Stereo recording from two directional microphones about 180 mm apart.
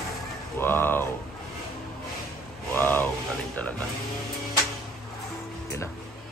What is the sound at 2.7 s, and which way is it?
Speech, 10° left (ahead or behind).